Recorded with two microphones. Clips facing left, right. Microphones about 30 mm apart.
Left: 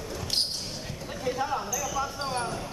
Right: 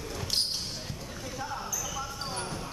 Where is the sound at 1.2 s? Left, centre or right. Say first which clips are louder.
Left 8 dB; left.